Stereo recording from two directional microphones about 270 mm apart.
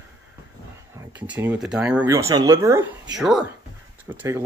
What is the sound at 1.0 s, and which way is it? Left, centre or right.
Speech, centre.